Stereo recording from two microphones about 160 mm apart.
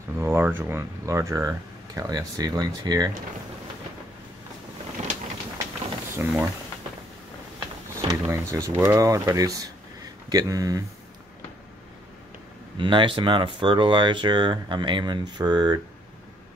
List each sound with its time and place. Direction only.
0.2 s speech: 15° right (ahead or behind)
5.0 s a sound: 45° right (ahead or behind)
6.2 s speech: 15° right (ahead or behind)
8.1 s speech: 20° right (ahead or behind)
12.7 s speech: 30° right (ahead or behind)